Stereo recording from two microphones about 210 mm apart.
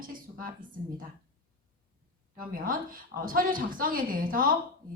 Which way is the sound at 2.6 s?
40° right (ahead or behind).